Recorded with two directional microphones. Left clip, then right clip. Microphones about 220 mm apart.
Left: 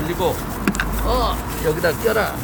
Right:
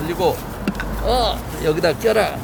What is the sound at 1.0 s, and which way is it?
Speech, 45° right (ahead or behind).